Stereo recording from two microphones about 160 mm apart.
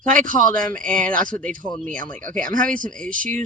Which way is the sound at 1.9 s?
55° right (ahead or behind).